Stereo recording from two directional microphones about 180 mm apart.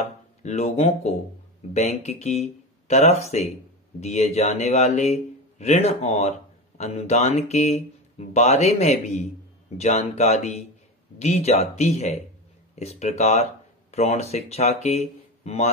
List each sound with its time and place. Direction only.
0.4 s speech: 40° left (ahead or behind)